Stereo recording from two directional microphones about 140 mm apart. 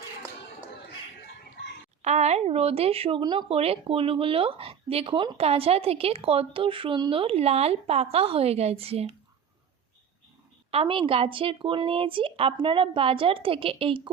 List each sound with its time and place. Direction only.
2.0 s speech: 50° right (ahead or behind)
10.7 s speech: 40° right (ahead or behind)